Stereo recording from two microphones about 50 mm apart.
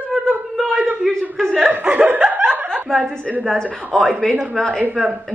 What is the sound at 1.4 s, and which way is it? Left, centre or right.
Chuckle, centre.